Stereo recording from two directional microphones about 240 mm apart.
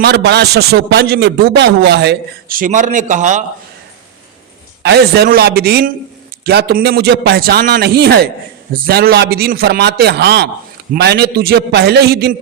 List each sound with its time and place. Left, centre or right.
0.0 s a man's voice: right
4.8 s a man's voice: right